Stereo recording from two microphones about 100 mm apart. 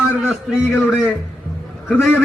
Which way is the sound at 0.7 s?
15° left (ahead or behind).